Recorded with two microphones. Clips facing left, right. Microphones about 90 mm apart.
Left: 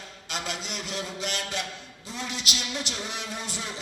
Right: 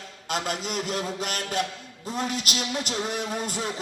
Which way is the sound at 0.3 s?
45° right (ahead or behind).